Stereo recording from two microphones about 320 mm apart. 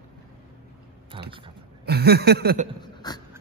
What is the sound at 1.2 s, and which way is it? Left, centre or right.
Speech, centre.